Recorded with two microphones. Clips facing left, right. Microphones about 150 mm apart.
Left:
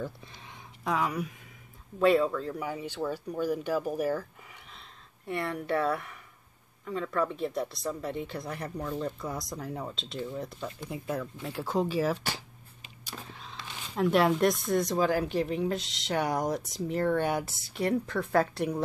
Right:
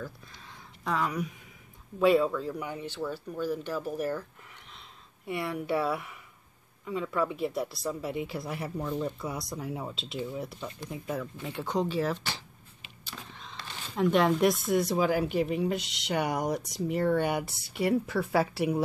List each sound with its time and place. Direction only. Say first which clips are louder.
0.0 s a sound: left 3 dB; 25° left (ahead or behind)
0.8 s speech: left 1 dB; 10° left (ahead or behind)
4.7 s a woman's voice: even; 5° right (ahead or behind)
13.3 s a woman's voice: even; 5° left (ahead or behind)